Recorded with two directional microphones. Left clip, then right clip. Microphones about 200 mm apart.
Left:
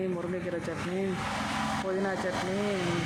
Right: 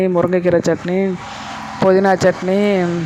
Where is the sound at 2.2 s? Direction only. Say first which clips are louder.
Right 18 dB; 50° right (ahead or behind).